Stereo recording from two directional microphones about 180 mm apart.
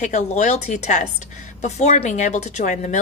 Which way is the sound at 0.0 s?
40° left (ahead or behind).